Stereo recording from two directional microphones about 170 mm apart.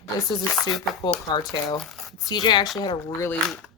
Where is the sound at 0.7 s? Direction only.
Centre (ahead or behind).